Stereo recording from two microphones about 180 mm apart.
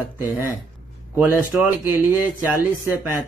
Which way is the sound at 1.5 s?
10° right (ahead or behind).